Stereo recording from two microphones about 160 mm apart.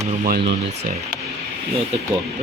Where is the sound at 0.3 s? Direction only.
90° right.